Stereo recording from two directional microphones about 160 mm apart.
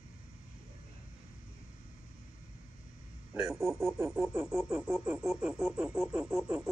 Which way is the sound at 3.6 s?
15° right (ahead or behind).